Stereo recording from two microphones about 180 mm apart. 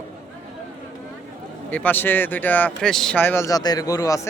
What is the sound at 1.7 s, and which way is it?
Speech, 10° left (ahead or behind).